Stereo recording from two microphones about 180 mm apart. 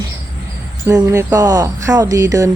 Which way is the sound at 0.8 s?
20° right (ahead or behind).